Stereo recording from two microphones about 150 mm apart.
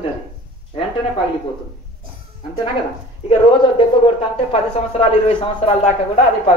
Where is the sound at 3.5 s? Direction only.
35° left (ahead or behind).